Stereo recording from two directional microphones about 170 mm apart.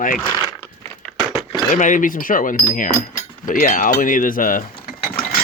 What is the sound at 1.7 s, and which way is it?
Speech, 50° left (ahead or behind).